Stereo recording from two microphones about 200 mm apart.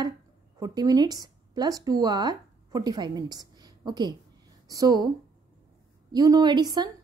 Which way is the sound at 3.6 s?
20° right (ahead or behind).